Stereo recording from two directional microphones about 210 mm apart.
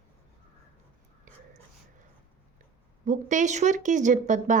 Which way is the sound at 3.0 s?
35° right (ahead or behind).